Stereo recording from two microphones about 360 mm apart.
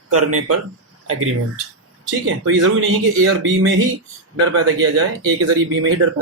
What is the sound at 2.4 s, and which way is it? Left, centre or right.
A man's voice, right.